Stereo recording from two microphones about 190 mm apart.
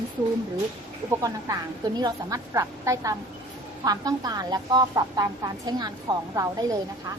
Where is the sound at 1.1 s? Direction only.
15° right (ahead or behind).